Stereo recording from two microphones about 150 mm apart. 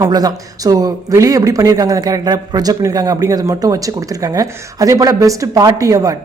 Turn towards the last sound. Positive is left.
turn(degrees=-25)  # may be behind; listen again after turning